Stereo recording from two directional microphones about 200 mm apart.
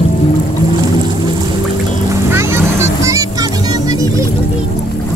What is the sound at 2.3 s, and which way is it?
Vehicle, 15° right (ahead or behind).